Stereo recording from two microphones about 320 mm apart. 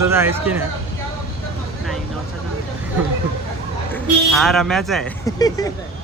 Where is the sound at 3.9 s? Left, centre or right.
Centre.